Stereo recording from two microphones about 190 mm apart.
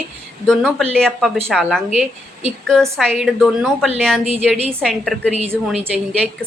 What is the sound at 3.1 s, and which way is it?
Speech, centre (ahead or behind).